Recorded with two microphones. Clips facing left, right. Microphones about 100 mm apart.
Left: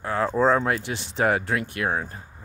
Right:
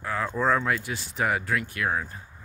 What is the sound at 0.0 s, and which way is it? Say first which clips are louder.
Speech: left 5 dB; 35° left (ahead or behind).